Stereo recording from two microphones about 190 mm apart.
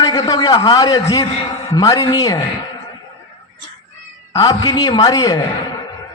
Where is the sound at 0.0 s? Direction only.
20° left (ahead or behind).